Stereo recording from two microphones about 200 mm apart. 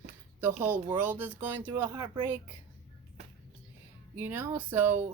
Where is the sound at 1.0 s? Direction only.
10° right (ahead or behind).